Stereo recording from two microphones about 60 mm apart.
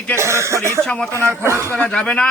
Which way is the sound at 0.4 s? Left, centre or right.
Right.